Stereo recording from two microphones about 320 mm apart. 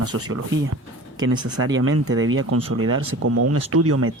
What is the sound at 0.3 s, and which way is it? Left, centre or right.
Speech, right.